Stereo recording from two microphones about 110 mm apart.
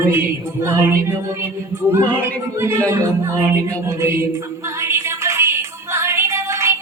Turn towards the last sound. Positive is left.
turn(degrees=-25)  # may be behind; listen again after turning